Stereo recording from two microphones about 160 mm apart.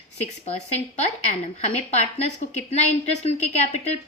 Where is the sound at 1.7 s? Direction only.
45° left (ahead or behind).